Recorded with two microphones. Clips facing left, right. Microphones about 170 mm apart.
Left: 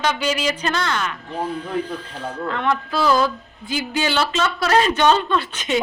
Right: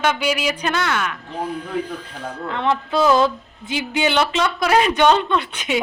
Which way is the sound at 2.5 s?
20° right (ahead or behind).